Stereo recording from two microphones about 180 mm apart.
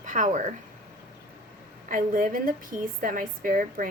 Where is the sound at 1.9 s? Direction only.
50° right (ahead or behind).